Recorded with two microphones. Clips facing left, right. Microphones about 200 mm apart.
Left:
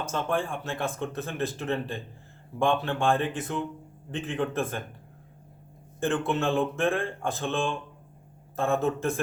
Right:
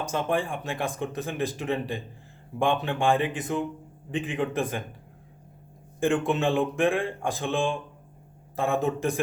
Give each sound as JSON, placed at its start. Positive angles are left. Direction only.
{"t": 0.0, "sound": "speech", "side_deg": -15}
{"t": 6.0, "sound": "speech", "side_deg": -15}